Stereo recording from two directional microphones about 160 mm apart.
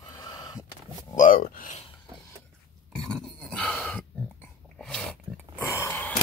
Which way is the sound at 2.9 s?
Centre (ahead or behind).